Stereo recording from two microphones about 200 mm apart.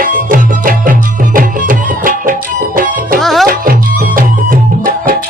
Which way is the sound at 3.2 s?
Centre (ahead or behind).